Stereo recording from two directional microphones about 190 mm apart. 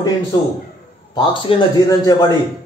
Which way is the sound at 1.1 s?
25° left (ahead or behind).